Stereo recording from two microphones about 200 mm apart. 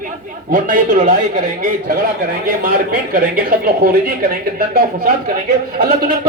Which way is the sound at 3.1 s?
45° right (ahead or behind).